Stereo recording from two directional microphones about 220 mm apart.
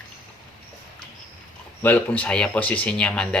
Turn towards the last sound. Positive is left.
turn(degrees=5)  # may be behind; listen again after turning